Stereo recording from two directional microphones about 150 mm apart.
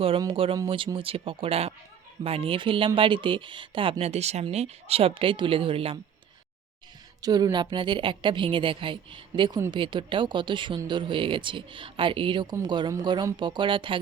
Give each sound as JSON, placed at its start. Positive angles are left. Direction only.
{"t": 0.2, "sound": "a woman's voice", "side_deg": -35}
{"t": 7.2, "sound": "a woman's voice", "side_deg": -25}